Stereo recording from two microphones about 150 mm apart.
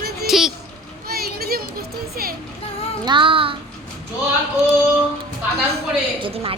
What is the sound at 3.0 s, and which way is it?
Speech, 35° right (ahead or behind).